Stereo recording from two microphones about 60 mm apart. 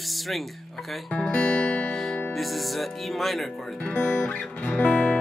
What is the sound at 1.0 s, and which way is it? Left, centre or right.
Guitar, centre.